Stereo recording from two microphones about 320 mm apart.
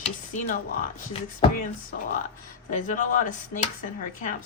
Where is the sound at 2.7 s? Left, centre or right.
Left.